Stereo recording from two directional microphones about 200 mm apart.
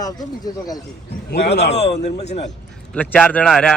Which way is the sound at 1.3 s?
55° left (ahead or behind).